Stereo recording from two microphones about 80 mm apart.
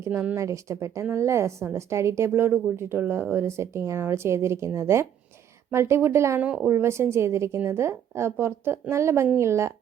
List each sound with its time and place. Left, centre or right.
0.0 s a woman's voice: right
3.4 s a woman's voice: right
6.4 s a woman's voice: centre
6.7 s a woman's voice: right